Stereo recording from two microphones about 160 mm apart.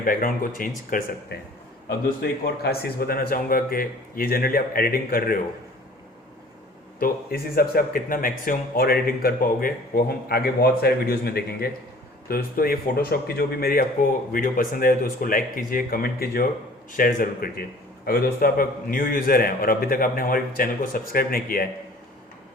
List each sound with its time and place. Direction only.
0.0 s speech: 60° left (ahead or behind)
1.9 s speech: 80° left
7.0 s speech: 70° left (ahead or behind)